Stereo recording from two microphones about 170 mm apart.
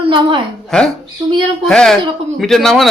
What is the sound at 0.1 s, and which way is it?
Speech, 30° right (ahead or behind).